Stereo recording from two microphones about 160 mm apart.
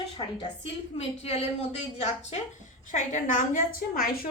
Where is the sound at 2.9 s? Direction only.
50° left (ahead or behind).